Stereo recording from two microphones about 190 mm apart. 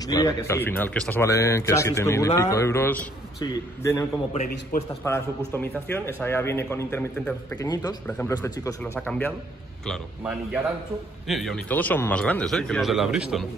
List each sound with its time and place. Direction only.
0.0 s a man's voice: 20° left (ahead or behind)
5.0 s a man's voice: 15° left (ahead or behind)
9.8 s speech: 5° right (ahead or behind)